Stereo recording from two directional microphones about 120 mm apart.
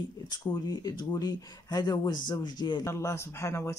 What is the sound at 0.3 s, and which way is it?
Speech, 40° left (ahead or behind).